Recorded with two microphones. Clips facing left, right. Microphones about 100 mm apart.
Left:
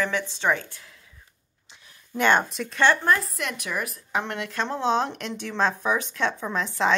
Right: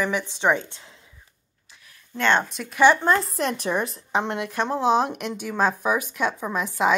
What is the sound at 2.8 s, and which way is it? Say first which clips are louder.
Speech: right 3 dB; 15° right (ahead or behind).